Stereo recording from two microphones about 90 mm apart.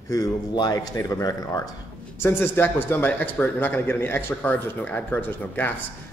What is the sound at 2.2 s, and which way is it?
Speech, 25° left (ahead or behind).